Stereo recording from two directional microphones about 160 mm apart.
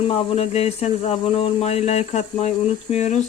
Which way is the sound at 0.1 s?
35° left (ahead or behind).